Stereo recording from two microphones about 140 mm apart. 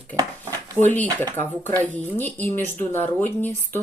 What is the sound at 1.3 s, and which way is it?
Speech, 15° left (ahead or behind).